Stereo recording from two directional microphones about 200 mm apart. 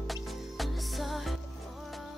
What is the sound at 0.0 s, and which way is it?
Music, centre (ahead or behind).